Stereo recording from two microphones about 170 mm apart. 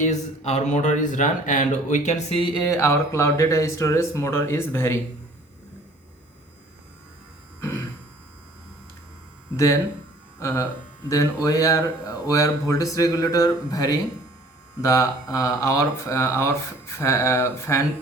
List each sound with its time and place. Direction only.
0.0 s speech: 40° left (ahead or behind)
2.6 s speech: 15° left (ahead or behind)
10.4 s speech: 15° left (ahead or behind)